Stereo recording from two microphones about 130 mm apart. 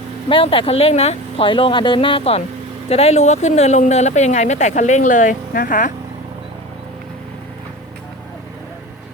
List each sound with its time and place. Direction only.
0.3 s speech: 45° left (ahead or behind); by 5.9 s 90° left